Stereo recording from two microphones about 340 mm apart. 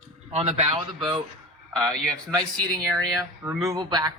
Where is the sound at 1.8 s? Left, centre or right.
Centre.